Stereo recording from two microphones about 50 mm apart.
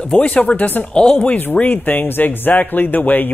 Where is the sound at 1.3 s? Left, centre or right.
Left.